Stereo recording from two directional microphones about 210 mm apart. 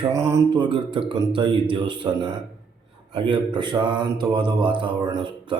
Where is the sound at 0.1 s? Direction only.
15° right (ahead or behind).